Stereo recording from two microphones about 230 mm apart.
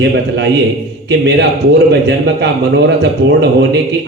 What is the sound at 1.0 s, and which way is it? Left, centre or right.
A man's voice, right.